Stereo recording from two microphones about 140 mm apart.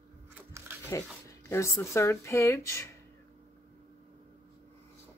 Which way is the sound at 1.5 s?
20° left (ahead or behind).